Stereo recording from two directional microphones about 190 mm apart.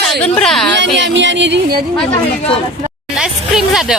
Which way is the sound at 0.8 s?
70° right (ahead or behind).